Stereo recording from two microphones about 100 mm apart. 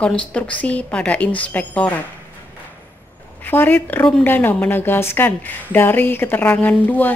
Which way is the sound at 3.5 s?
20° left (ahead or behind).